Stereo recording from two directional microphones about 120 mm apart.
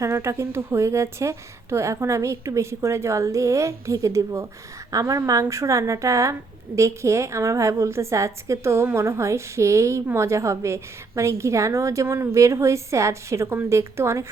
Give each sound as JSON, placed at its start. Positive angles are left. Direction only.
{"t": 0.0, "sound": "a woman's voice", "side_deg": -25}